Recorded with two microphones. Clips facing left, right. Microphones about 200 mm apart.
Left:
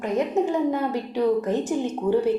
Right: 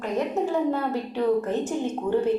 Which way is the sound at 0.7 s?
15° left (ahead or behind).